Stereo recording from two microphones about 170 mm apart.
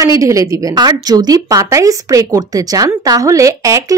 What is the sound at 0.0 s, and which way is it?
A woman's voice, 20° right (ahead or behind).